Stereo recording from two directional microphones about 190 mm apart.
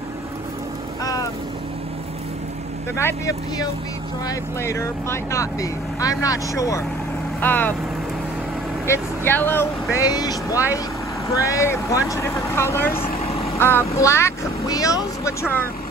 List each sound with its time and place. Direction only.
1.0 s boat: 20° left (ahead or behind)
3.0 s speech: 15° left (ahead or behind)
8.8 s speech: 15° left (ahead or behind)
13.0 s vehicle: 30° left (ahead or behind)
13.6 s speech: 10° left (ahead or behind)